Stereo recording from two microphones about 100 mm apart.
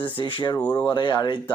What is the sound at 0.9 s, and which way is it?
Speech, 50° left (ahead or behind).